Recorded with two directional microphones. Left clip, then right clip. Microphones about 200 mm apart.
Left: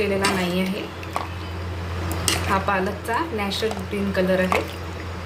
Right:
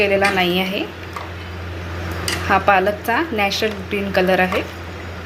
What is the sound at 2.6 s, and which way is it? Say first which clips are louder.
A woman's voice: right 8 dB; 30° right (ahead or behind).